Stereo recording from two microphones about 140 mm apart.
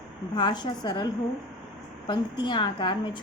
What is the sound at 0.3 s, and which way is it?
A woman's voice, 30° left (ahead or behind).